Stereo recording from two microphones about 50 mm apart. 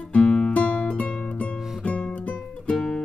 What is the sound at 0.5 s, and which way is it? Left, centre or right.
Music, left.